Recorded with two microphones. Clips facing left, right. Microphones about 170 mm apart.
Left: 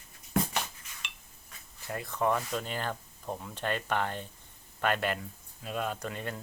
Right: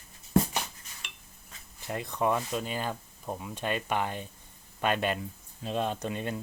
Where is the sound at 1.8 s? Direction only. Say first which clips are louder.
Right 1 dB; 20° right (ahead or behind).